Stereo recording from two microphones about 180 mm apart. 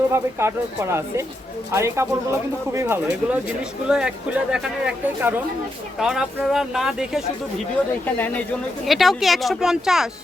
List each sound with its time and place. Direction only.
0.1 s speech: 15° right (ahead or behind)
8.0 s speech: 10° left (ahead or behind)